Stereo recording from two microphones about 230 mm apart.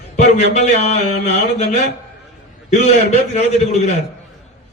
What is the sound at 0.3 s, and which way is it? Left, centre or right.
A man's voice, left.